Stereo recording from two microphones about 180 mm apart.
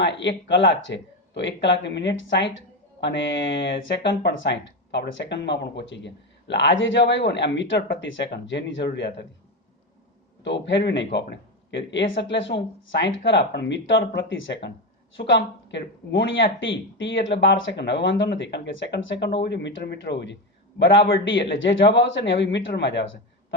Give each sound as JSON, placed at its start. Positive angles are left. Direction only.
{"t": 0.0, "sound": "speech", "side_deg": 75}
{"t": 10.4, "sound": "speech", "side_deg": 85}